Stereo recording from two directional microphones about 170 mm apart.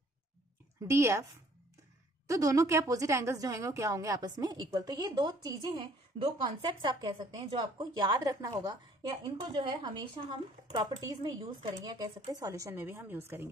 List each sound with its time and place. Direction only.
0.8 s speech: 15° right (ahead or behind)
2.2 s a woman's voice: 20° right (ahead or behind)